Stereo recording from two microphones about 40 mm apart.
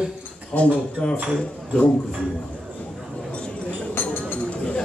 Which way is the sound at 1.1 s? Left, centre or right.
Right.